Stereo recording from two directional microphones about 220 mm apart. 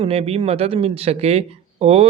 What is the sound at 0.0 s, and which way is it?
Speech, 25° right (ahead or behind).